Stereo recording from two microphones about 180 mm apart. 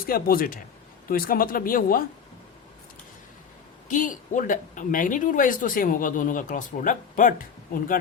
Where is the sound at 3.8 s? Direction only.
45° left (ahead or behind).